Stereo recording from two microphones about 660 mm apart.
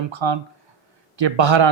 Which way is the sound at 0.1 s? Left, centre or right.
Right.